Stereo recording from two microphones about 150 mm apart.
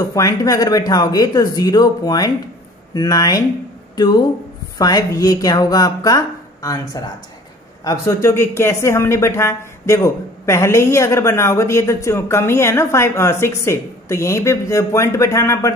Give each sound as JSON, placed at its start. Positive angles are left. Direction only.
{"t": 0.0, "sound": "speech", "side_deg": 20}